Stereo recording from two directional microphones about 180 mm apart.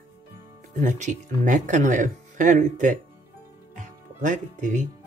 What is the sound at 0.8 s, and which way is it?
Speech, 45° right (ahead or behind).